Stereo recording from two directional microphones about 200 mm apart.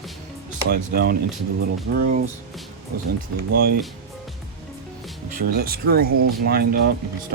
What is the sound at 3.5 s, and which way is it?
Speech, 50° right (ahead or behind).